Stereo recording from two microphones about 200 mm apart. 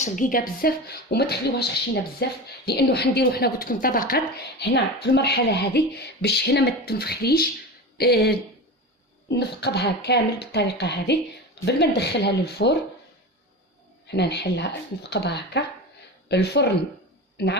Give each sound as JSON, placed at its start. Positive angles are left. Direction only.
{"t": 0.0, "sound": "a woman's voice", "side_deg": 40}
{"t": 14.1, "sound": "a woman's voice", "side_deg": 60}